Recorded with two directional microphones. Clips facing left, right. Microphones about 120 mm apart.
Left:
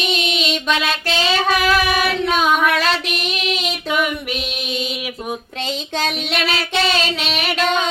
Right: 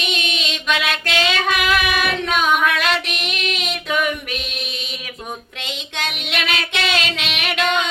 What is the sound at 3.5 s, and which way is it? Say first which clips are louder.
Female singing: left 1 dB; 5° left (ahead or behind).